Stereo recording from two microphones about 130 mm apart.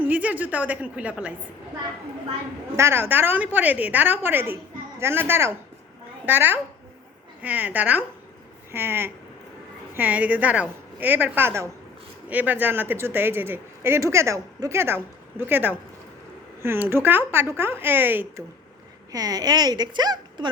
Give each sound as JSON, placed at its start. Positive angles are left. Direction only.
{"t": 0.0, "sound": "speech", "side_deg": -10}
{"t": 2.7, "sound": "a woman's voice", "side_deg": -20}
{"t": 19.1, "sound": "a woman's voice", "side_deg": -30}